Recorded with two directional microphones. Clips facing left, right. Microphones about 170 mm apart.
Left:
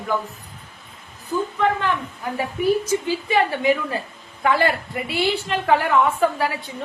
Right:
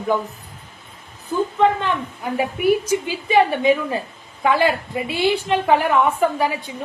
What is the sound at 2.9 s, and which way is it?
A woman's voice, 15° right (ahead or behind).